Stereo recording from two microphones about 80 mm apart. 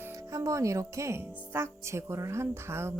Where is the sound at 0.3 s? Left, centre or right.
Right.